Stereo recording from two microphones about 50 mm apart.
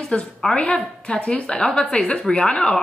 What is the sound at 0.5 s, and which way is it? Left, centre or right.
A woman's voice, left.